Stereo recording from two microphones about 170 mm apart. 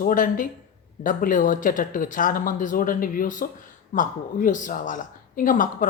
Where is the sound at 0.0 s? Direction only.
55° left (ahead or behind).